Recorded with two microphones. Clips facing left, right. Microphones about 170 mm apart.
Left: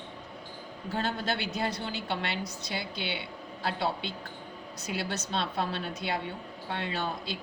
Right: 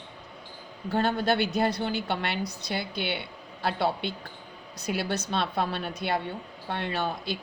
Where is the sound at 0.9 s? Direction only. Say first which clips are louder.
Right 7 dB; 60° right (ahead or behind).